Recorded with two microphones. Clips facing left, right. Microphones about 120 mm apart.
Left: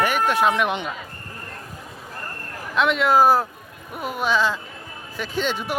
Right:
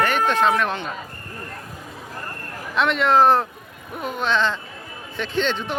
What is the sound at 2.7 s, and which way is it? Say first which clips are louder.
Speech: even; centre (ahead or behind).